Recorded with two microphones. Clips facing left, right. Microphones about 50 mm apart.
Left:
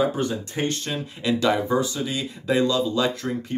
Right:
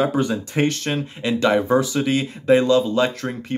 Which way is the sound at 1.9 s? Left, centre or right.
Right.